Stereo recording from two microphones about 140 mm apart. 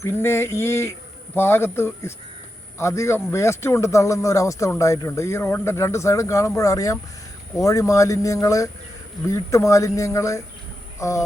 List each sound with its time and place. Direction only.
0.0 s a man's voice: 15° left (ahead or behind)